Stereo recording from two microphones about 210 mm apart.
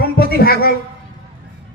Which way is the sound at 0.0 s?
45° left (ahead or behind).